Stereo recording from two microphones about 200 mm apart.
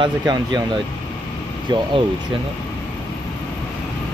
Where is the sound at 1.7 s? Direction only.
20° right (ahead or behind).